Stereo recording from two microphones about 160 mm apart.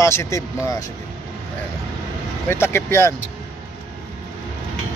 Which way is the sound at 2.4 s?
15° left (ahead or behind).